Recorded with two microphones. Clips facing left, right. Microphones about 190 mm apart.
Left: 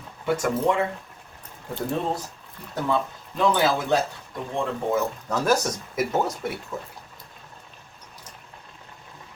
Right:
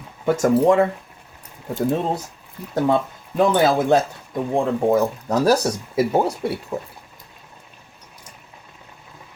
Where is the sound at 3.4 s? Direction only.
50° right (ahead or behind).